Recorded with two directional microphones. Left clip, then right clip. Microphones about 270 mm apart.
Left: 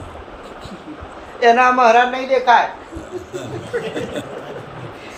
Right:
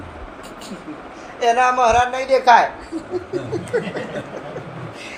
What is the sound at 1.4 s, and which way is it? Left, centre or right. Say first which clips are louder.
A woman's voice: left 4 dB; right.